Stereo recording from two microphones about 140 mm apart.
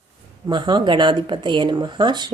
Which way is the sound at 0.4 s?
30° right (ahead or behind).